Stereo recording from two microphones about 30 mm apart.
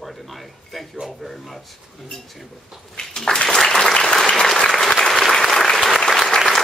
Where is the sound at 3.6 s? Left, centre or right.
Centre.